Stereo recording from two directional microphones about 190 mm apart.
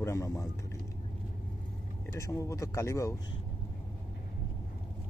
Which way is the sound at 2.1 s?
15° left (ahead or behind).